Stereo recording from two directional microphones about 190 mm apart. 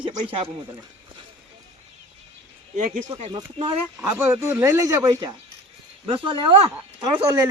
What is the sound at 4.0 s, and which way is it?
A man's voice, 15° right (ahead or behind).